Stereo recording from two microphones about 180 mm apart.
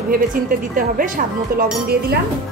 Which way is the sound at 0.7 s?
50° right (ahead or behind).